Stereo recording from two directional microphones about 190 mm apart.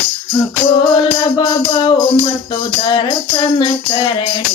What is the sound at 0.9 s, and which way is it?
Music, 25° left (ahead or behind).